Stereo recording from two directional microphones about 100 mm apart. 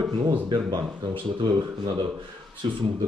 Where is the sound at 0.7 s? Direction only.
50° right (ahead or behind).